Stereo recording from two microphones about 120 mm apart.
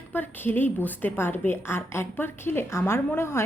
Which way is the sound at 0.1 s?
15° left (ahead or behind).